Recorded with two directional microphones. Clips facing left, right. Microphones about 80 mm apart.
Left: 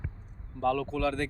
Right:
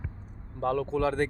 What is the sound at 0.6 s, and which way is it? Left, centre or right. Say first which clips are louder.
Speech: right 1 dB; right.